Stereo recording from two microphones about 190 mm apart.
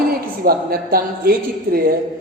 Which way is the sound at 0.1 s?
50° right (ahead or behind).